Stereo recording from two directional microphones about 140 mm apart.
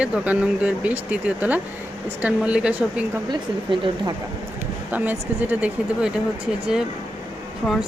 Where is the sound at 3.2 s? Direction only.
35° right (ahead or behind).